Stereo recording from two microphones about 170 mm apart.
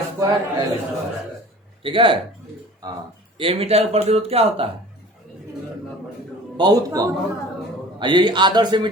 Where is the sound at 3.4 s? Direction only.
35° right (ahead or behind).